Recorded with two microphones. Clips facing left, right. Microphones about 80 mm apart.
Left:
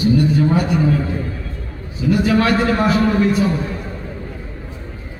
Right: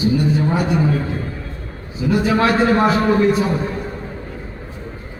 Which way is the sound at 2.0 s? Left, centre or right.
Right.